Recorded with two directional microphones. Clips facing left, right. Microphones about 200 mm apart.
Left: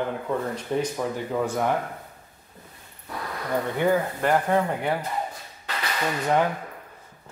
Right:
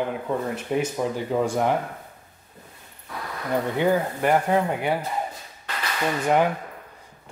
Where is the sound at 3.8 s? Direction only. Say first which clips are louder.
Even; 15° right (ahead or behind).